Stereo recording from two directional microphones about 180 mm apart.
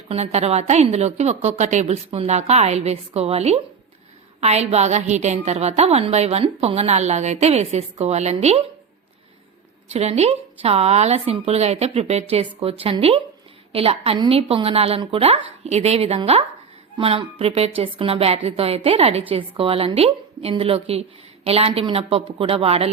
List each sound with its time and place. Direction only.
0.1 s a woman's voice: 35° right (ahead or behind)
9.9 s a woman's voice: 35° right (ahead or behind)